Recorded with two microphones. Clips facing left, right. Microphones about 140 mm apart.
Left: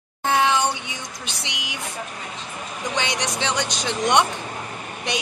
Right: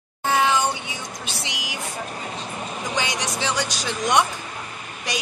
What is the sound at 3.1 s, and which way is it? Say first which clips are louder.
Speech: left 1 dB; 20° left (ahead or behind).